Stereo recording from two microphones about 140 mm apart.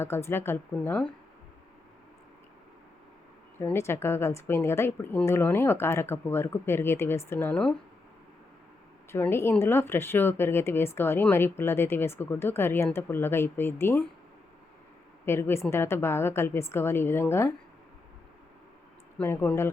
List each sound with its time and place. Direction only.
0.0 s speech: 15° left (ahead or behind)
3.6 s speech: 15° left (ahead or behind)
9.1 s speech: 15° left (ahead or behind)
15.3 s speech: 20° left (ahead or behind)
19.2 s speech: 15° left (ahead or behind)